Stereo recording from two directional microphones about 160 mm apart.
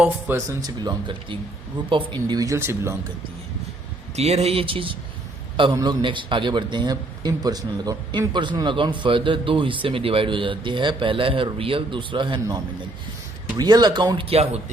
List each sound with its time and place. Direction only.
0.0 s speech: 15° right (ahead or behind)
0.6 s speech: 25° right (ahead or behind)
4.1 s a man's voice: 40° right (ahead or behind)